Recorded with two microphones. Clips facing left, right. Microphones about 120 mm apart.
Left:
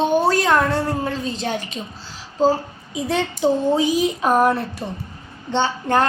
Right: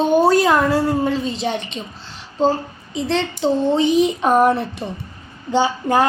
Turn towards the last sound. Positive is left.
turn(degrees=-5)  # may be behind; listen again after turning